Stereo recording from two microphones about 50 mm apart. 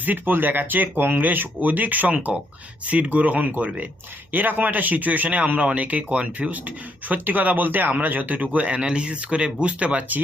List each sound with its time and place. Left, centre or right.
0.0 s speech: right